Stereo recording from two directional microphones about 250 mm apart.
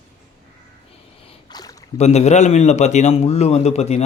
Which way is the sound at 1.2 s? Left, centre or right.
Centre.